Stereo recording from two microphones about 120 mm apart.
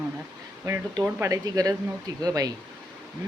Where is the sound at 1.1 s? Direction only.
25° right (ahead or behind).